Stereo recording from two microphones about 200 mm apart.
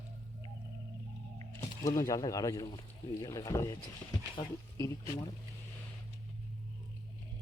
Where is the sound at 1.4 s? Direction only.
20° left (ahead or behind).